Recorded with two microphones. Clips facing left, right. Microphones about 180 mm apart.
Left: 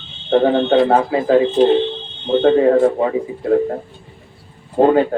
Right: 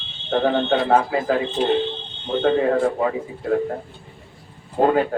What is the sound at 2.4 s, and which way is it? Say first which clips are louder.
Speech: left 6 dB; 25° left (ahead or behind).